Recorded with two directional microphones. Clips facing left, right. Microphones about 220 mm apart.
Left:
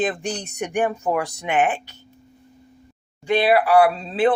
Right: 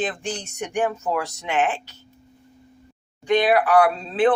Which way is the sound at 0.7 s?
15° left (ahead or behind).